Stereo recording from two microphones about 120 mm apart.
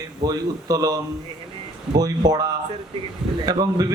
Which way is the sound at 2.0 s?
30° right (ahead or behind).